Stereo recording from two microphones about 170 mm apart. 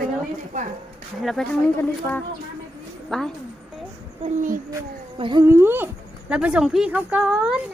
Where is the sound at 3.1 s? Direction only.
5° left (ahead or behind).